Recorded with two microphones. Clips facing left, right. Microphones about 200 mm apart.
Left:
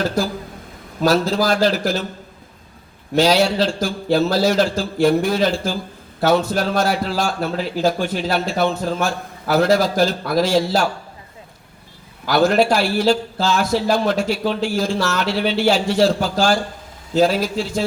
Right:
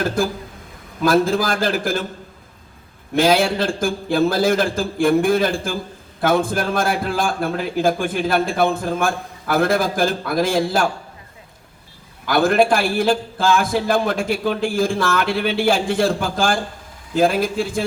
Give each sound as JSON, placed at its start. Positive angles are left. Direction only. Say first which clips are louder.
{"t": 0.0, "sound": "a man's voice", "louder": "even", "side_deg": -50}
{"t": 3.2, "sound": "a man's voice", "louder": "left 1 dB", "side_deg": -50}
{"t": 12.2, "sound": "a man's voice", "louder": "even", "side_deg": -55}